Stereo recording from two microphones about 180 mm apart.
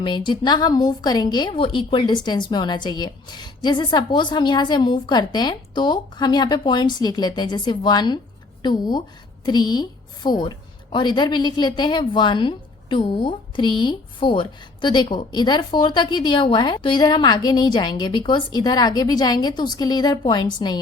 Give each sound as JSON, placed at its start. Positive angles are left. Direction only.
{"t": 0.0, "sound": "a woman's voice", "side_deg": 25}